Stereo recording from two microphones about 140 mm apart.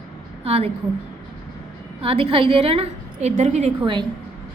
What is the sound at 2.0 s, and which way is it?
A woman's voice, 40° right (ahead or behind).